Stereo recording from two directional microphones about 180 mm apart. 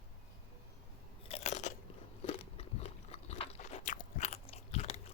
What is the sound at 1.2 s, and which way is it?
Chewing, 35° left (ahead or behind).